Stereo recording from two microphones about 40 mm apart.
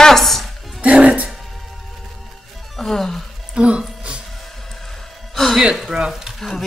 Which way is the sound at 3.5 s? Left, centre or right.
Right.